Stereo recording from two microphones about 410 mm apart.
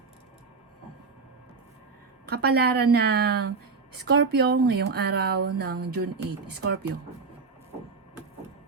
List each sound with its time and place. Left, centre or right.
2.2 s speech: right